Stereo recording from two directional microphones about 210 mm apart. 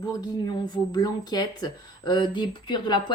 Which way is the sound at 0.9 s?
20° left (ahead or behind).